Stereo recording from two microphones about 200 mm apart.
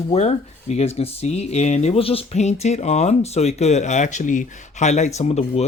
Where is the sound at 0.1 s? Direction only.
35° left (ahead or behind).